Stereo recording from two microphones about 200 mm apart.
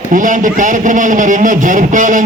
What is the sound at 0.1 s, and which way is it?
Speech, 40° right (ahead or behind).